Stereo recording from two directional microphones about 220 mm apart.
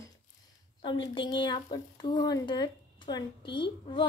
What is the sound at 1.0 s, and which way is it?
A woman's voice, 20° left (ahead or behind).